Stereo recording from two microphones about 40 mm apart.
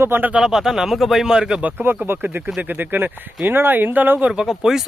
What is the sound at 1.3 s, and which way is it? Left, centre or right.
Speech, right.